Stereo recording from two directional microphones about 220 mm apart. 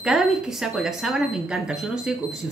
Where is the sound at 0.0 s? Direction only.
Centre (ahead or behind).